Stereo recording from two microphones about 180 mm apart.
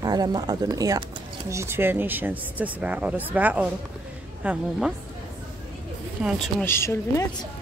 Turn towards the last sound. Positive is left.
turn(degrees=15)  # may be behind; listen again after turning